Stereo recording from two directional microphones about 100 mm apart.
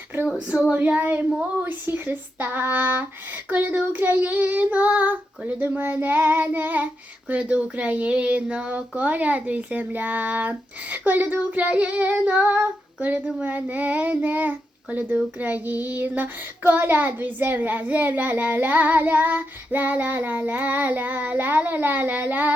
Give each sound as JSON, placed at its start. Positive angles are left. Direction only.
{"t": 0.3, "sound": "child singing", "side_deg": -10}
{"t": 1.6, "sound": "a sound", "side_deg": -20}
{"t": 3.5, "sound": "child singing", "side_deg": -15}